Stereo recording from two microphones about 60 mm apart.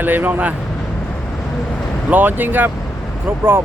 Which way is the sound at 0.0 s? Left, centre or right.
Right.